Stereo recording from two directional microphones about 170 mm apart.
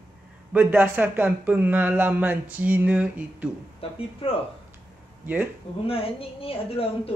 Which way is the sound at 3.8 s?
35° left (ahead or behind).